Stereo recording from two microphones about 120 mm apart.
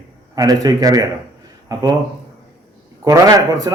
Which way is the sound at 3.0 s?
30° right (ahead or behind).